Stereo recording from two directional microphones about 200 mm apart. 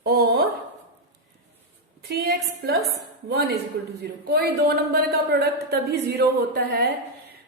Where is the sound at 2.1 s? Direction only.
50° right (ahead or behind).